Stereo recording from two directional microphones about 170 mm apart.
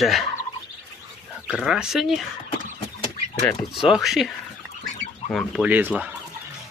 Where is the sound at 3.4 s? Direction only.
Centre (ahead or behind).